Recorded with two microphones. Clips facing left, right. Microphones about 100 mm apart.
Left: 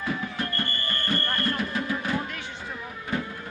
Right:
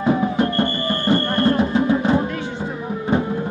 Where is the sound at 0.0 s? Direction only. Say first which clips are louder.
Right 12 dB; 25° right (ahead or behind).